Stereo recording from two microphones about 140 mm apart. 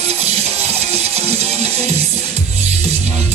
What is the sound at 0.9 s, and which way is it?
Music, 50° right (ahead or behind).